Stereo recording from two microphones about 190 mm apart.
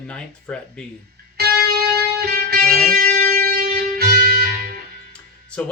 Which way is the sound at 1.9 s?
55° right (ahead or behind).